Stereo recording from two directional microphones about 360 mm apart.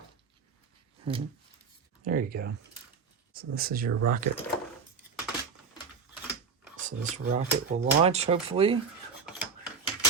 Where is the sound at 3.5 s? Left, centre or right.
Right.